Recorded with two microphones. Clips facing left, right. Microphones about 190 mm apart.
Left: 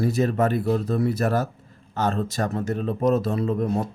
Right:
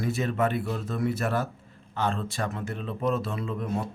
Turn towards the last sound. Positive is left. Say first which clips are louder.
# left 7 dB
turn(degrees=40)  # may be behind; listen again after turning